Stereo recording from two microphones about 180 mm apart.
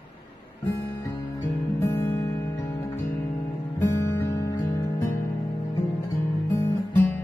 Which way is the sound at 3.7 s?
15° left (ahead or behind).